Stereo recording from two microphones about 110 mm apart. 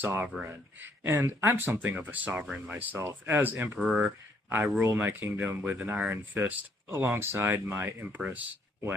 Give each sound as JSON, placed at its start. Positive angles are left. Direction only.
{"t": 0.0, "sound": "speech", "side_deg": -20}
{"t": 3.8, "sound": "speech", "side_deg": -5}
{"t": 4.4, "sound": "speech", "side_deg": -20}